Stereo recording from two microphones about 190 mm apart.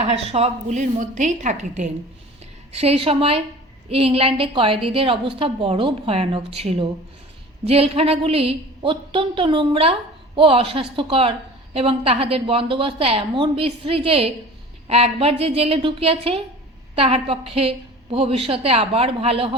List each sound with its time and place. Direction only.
0.0 s a woman's voice: 30° right (ahead or behind)